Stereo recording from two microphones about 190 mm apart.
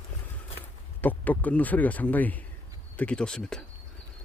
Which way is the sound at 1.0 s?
10° left (ahead or behind).